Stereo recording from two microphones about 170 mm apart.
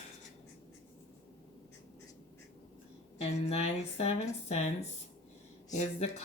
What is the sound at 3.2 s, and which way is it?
Speech, 35° left (ahead or behind).